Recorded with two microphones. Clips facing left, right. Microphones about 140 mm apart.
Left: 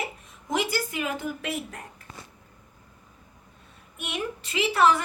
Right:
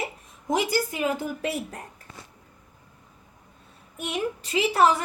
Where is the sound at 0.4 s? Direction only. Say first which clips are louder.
Right 3 dB; 35° right (ahead or behind).